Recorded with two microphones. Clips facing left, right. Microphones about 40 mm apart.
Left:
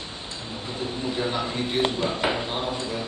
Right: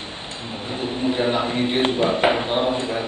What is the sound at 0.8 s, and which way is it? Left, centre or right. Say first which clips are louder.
Speech: right 6 dB; right.